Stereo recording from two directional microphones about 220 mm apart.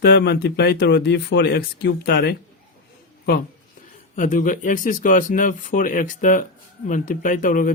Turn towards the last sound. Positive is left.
turn(degrees=40)  # may be behind; listen again after turning